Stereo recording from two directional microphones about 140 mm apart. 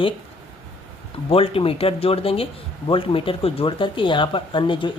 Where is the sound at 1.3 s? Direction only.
40° left (ahead or behind).